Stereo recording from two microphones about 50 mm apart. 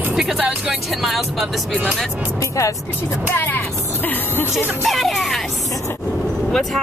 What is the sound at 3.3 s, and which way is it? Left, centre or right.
Speech, left.